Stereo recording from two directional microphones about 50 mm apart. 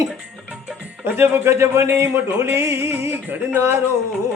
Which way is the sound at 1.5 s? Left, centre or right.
Right.